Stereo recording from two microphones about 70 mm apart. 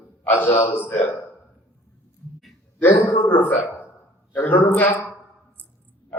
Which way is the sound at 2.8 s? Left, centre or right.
Left.